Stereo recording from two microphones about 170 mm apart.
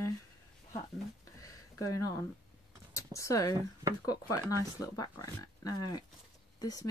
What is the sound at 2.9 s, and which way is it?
Speech, 20° left (ahead or behind).